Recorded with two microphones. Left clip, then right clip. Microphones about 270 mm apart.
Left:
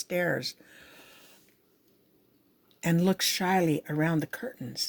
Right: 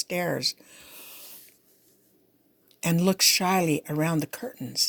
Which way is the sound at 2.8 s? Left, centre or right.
Right.